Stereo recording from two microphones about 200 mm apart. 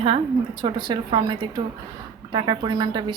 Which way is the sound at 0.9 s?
20° right (ahead or behind).